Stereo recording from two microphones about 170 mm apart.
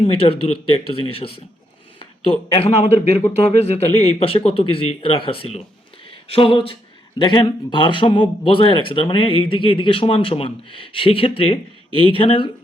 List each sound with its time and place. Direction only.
0.0 s speech: 35° left (ahead or behind)
2.6 s speech: 40° left (ahead or behind)